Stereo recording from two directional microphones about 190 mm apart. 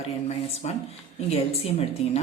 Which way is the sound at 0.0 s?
35° left (ahead or behind).